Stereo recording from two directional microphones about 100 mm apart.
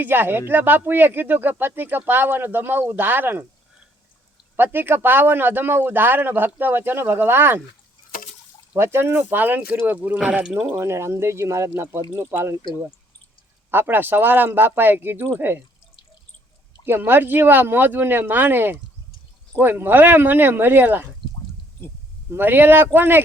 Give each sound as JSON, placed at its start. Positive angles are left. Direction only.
{"t": 0.0, "sound": "speech", "side_deg": -20}
{"t": 4.5, "sound": "speech", "side_deg": -20}
{"t": 8.7, "sound": "speech", "side_deg": -25}
{"t": 10.2, "sound": "speech", "side_deg": -10}
{"t": 13.7, "sound": "speech", "side_deg": -20}
{"t": 16.8, "sound": "speech", "side_deg": -20}
{"t": 22.3, "sound": "speech", "side_deg": -20}